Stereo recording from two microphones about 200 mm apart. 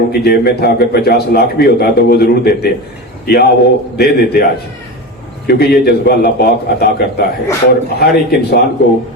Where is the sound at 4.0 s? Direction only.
50° left (ahead or behind).